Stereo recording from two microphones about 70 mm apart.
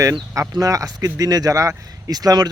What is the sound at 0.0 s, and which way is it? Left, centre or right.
Speech, right.